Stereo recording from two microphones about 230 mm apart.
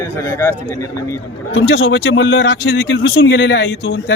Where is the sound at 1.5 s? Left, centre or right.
Left.